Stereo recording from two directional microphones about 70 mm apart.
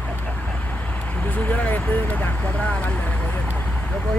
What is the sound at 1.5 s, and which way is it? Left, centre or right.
Speech, left.